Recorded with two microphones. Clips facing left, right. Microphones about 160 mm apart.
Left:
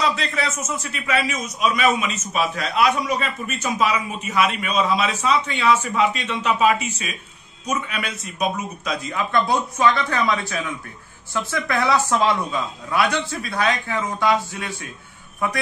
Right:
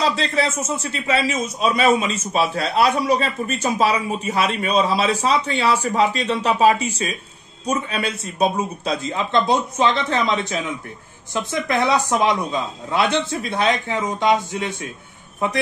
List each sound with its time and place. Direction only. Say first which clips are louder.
0.0 s a man's voice: right 3 dB; 30° right (ahead or behind)